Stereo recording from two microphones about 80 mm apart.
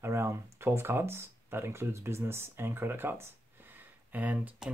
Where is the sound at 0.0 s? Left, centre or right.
Right.